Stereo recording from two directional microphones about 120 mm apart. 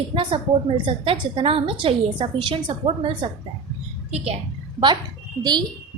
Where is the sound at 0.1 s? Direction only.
45° right (ahead or behind).